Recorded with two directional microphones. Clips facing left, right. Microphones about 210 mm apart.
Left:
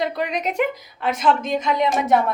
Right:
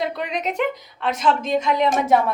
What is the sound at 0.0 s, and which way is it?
A woman's voice, centre (ahead or behind).